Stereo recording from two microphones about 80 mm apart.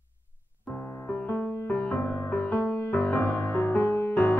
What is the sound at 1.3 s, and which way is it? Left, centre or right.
Music, left.